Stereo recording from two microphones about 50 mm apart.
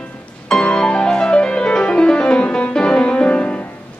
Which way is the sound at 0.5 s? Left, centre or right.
Centre.